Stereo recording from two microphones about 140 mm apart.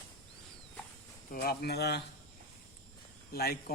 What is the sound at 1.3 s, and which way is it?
Speech, 70° left (ahead or behind).